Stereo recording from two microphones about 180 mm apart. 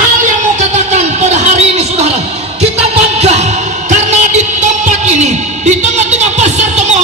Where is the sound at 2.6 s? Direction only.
35° right (ahead or behind).